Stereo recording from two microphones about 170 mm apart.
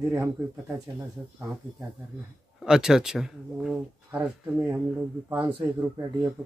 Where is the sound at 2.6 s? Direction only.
5° right (ahead or behind).